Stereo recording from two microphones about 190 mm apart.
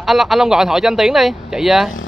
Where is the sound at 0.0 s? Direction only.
Centre (ahead or behind).